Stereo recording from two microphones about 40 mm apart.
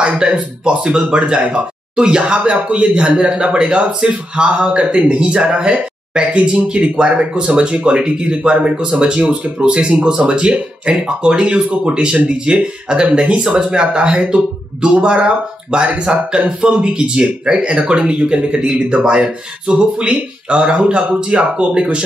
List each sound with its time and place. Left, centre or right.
0.2 s speech: right
9.9 s speech: centre